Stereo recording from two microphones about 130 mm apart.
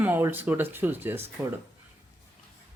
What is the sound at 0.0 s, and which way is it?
Speech, 15° right (ahead or behind).